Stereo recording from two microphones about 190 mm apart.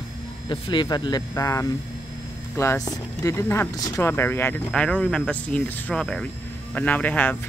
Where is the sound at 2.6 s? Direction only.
15° left (ahead or behind).